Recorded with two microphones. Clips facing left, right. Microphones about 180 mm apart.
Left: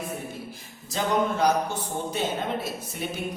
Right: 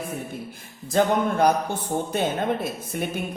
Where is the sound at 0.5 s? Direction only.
55° right (ahead or behind).